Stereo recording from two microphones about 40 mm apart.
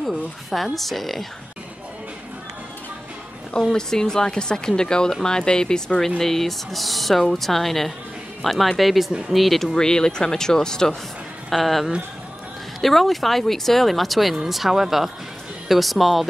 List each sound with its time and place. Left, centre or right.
0.0 s speech: centre
3.5 s a woman's voice: centre
9.8 s a woman's voice: centre
11.5 s speech: centre